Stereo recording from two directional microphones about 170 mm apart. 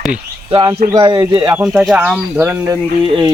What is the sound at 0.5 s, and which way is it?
Speech, 25° right (ahead or behind).